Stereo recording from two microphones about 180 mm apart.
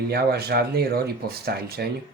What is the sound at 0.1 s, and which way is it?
Speech, 60° right (ahead or behind).